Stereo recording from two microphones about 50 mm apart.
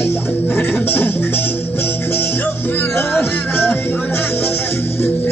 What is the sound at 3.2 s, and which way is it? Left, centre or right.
Music, left.